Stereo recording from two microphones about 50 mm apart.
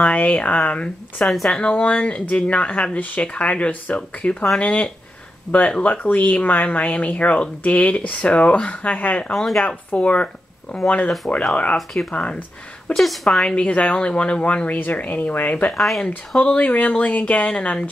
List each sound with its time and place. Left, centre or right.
0.0 s speech: left
1.2 s speech: centre
1.6 s speech: left
9.3 s speech: centre
9.9 s speech: left
12.9 s speech: centre
13.6 s speech: left